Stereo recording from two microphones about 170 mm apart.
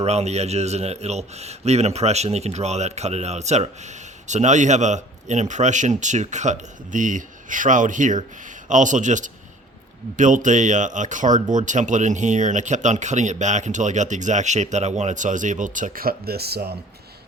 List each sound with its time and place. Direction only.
0.0 s a man's voice: 40° right (ahead or behind); by 16.7 s 70° right (ahead or behind)